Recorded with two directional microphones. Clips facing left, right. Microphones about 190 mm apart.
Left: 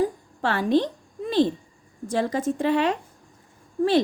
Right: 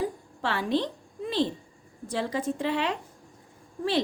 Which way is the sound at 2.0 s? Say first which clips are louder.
Left 5 dB; 45° left (ahead or behind).